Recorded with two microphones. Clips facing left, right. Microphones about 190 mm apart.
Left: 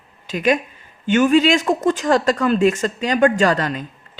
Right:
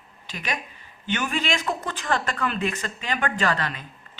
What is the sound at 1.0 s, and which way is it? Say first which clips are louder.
Speech: left 13 dB; 45° left (ahead or behind).